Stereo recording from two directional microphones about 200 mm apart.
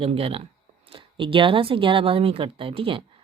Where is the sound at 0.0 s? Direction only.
30° right (ahead or behind).